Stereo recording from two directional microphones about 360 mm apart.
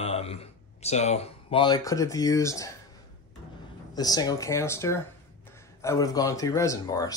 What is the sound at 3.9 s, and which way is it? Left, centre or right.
Speech, centre.